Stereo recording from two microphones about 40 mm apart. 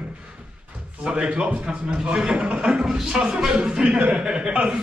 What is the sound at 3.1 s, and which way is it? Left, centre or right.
Speech, right.